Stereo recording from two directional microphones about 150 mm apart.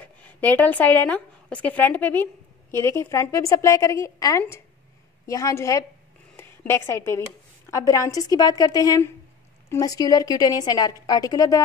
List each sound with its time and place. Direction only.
0.0 s a woman's voice: 10° left (ahead or behind)